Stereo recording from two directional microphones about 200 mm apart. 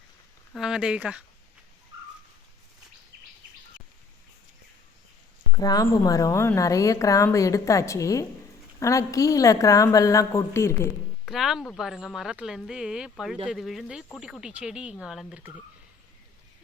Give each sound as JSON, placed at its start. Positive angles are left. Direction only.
{"t": 0.5, "sound": "speech", "side_deg": -5}
{"t": 5.5, "sound": "a woman's voice", "side_deg": 20}
{"t": 11.3, "sound": "speech", "side_deg": 0}